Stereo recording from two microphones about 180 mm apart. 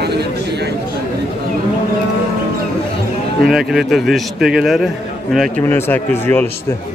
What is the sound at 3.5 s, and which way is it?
Speech, centre (ahead or behind).